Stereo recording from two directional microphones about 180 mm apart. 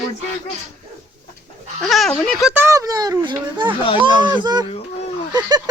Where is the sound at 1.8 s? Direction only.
Centre (ahead or behind).